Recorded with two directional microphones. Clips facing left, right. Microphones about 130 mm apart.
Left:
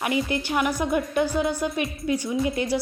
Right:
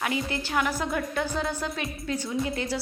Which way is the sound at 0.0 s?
15° left (ahead or behind).